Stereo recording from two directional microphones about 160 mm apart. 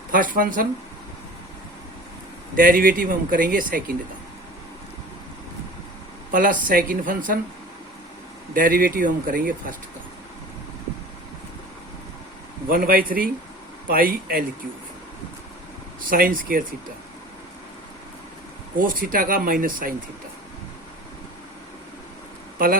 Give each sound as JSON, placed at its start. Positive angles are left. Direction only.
{"t": 0.1, "sound": "speech", "side_deg": -60}
{"t": 2.6, "sound": "speech", "side_deg": -60}
{"t": 6.3, "sound": "speech", "side_deg": -60}
{"t": 8.5, "sound": "speech", "side_deg": -60}
{"t": 12.6, "sound": "speech", "side_deg": -65}
{"t": 16.0, "sound": "speech", "side_deg": -60}
{"t": 18.8, "sound": "speech", "side_deg": -60}
{"t": 22.5, "sound": "speech", "side_deg": -65}